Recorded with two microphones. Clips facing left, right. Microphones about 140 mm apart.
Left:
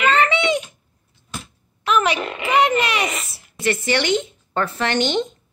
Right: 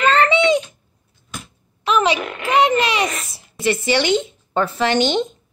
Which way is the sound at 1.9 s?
20° right (ahead or behind).